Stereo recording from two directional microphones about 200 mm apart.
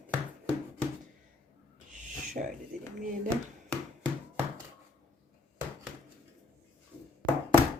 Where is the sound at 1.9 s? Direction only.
40° right (ahead or behind).